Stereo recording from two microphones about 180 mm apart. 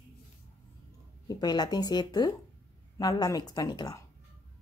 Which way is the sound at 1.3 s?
20° left (ahead or behind).